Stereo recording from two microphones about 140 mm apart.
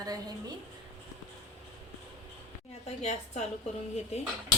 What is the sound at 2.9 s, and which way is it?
Speech, 55° left (ahead or behind).